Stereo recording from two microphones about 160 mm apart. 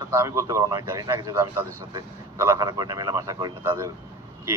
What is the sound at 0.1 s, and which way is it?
A man's voice, 15° right (ahead or behind).